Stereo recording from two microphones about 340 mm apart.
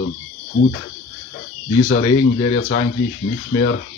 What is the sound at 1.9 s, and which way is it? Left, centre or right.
Speech, centre.